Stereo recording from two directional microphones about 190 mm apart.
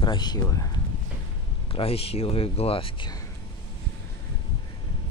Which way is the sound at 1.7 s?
30° left (ahead or behind).